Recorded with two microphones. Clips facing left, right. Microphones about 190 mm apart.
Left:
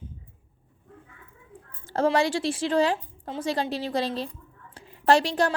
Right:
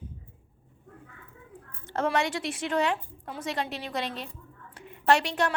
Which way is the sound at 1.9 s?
30° left (ahead or behind).